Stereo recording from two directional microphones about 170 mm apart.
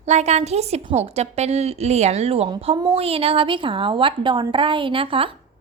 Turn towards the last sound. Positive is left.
turn(degrees=-30)  # may be behind; listen again after turning